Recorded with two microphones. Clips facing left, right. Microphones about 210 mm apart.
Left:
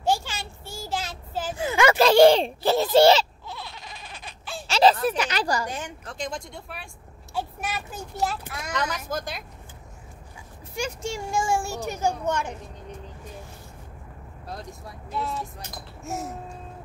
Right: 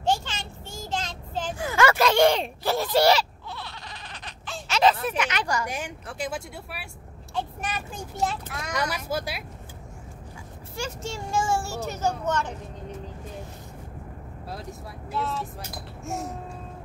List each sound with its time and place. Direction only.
0.0 s child singing: 10° left (ahead or behind)
1.6 s a sound: 20° left (ahead or behind)
2.0 s speech: 30° left (ahead or behind)
3.4 s baby cry: 10° left (ahead or behind)
4.6 s speech: 30° left (ahead or behind)
5.7 s speech: 10° right (ahead or behind)
7.3 s a child's voice: 10° left (ahead or behind)
8.7 s speech: 10° right (ahead or behind)
10.8 s a child's voice: 15° left (ahead or behind)
14.5 s speech: 5° right (ahead or behind)